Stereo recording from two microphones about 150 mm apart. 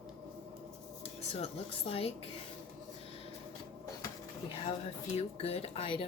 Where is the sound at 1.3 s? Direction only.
40° left (ahead or behind).